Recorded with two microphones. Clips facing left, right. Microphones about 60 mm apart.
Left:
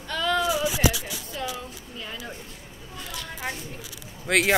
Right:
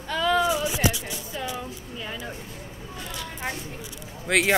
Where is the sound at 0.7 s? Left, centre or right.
Left.